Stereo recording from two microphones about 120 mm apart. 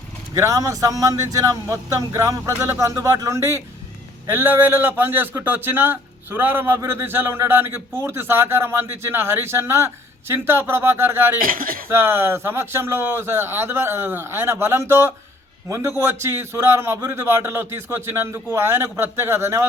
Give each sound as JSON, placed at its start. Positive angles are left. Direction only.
{"t": 0.3, "sound": "a man's voice", "side_deg": -25}